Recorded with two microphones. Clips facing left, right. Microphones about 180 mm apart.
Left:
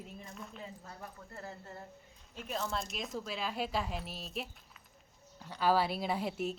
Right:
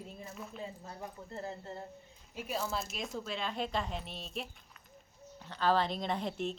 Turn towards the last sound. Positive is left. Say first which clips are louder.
# even
turn(degrees=5)  # may be behind; listen again after turning